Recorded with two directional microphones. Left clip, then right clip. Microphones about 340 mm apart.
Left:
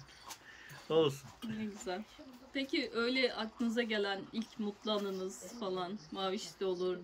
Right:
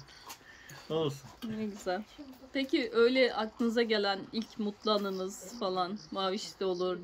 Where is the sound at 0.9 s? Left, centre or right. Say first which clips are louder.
Left 2 dB; centre.